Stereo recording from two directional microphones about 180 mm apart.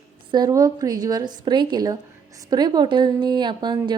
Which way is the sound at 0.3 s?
25° right (ahead or behind).